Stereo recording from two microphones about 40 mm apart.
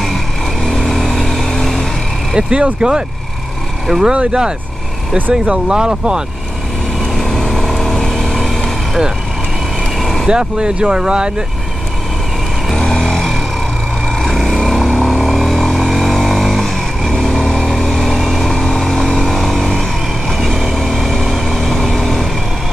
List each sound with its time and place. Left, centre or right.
0.7 s vehicle: centre
2.3 s speech: right
3.8 s speech: centre
4.1 s speech: right
7.2 s vehicle: centre
10.2 s speech: right
12.7 s a sound: centre
14.1 s vehicle: centre
18.5 s vehicle: centre
18.8 s vehicle: centre